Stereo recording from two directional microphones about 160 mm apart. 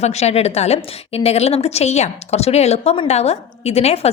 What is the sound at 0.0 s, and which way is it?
A woman's voice, 45° left (ahead or behind).